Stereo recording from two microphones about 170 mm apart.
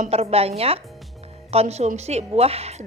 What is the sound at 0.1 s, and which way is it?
A woman's voice, 35° right (ahead or behind).